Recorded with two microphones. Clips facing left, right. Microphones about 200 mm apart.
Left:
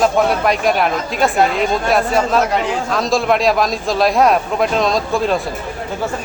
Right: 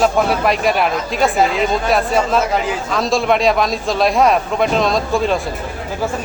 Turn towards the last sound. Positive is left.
turn(degrees=0)  # may be behind; listen again after turning